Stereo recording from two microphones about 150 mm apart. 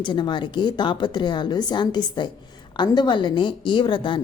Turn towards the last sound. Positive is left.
turn(degrees=35)  # may be behind; listen again after turning